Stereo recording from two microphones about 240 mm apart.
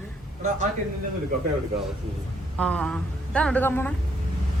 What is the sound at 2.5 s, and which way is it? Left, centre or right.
A woman's voice, centre.